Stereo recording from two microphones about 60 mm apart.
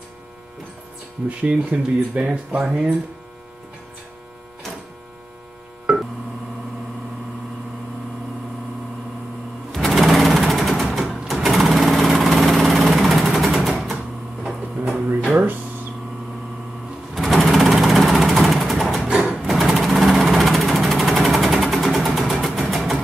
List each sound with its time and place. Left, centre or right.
1.4 s speech: right
5.9 s a sound: centre
9.7 s sewing machine: centre
11.4 s vehicle: centre
13.7 s typewriter: centre
17.1 s sewing machine: centre
18.9 s sewing machine: centre
21.5 s vehicle: centre